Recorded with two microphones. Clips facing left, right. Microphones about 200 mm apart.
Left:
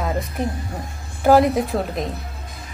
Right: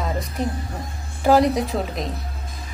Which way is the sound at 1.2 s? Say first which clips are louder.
Left 2 dB; centre (ahead or behind).